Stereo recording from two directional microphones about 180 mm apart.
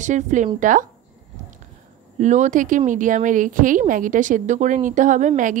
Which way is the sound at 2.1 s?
40° right (ahead or behind).